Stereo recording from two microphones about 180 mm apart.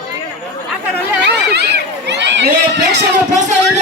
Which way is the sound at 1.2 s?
65° right (ahead or behind).